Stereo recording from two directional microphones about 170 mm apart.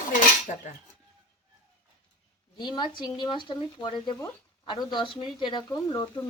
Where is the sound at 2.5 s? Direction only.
25° left (ahead or behind).